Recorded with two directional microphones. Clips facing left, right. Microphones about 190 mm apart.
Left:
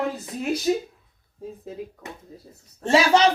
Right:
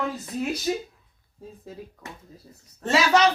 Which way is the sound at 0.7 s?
20° left (ahead or behind).